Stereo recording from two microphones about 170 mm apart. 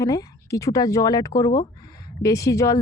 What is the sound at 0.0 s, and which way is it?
Speech, 20° left (ahead or behind).